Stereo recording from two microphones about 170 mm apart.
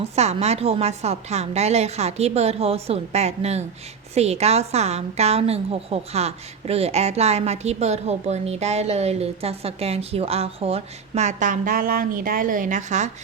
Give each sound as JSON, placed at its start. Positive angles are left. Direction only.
{"t": 0.0, "sound": "a woman's voice", "side_deg": -40}